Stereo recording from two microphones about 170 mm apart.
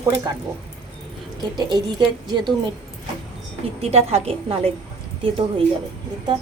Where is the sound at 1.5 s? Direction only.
25° right (ahead or behind).